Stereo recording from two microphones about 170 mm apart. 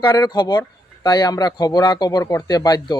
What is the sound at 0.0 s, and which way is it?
Speech, 25° left (ahead or behind).